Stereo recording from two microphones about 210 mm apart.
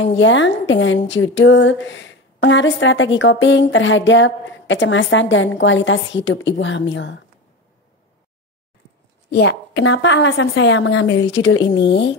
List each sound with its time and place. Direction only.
0.0 s a woman's voice: 60° left (ahead or behind)
9.3 s a woman's voice: 55° left (ahead or behind)